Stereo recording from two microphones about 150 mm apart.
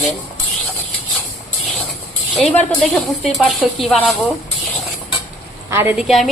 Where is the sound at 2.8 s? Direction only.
Centre (ahead or behind).